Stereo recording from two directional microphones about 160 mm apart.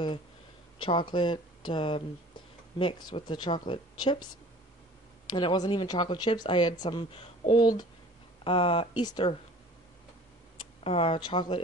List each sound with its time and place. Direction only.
0.7 s speech: 30° left (ahead or behind)
10.8 s speech: 35° left (ahead or behind)